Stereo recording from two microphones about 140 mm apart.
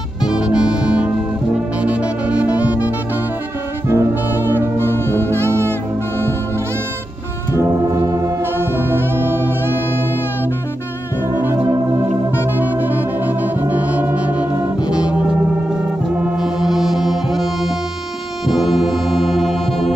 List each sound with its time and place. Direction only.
0.2 s music: 5° right (ahead or behind)
1.8 s saxophone: 10° right (ahead or behind)
3.9 s brass instrument: 15° right (ahead or behind)
4.7 s brass instrument: 15° left (ahead or behind)
5.3 s music: 20° right (ahead or behind)
7.6 s music: 25° right (ahead or behind)
12.5 s music: 15° right (ahead or behind)
15.7 s brass instrument: 10° right (ahead or behind)
18.5 s music: centre (ahead or behind)